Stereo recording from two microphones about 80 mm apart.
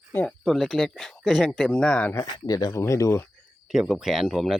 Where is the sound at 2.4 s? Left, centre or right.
Left.